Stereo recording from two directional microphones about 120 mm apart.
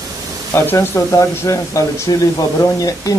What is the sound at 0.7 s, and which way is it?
Speech, 25° left (ahead or behind).